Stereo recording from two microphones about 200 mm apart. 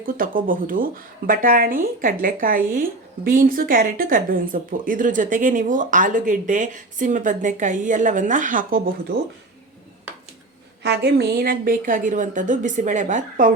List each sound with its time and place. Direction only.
0.0 s speech: 45° right (ahead or behind)
10.8 s a woman's voice: 55° right (ahead or behind)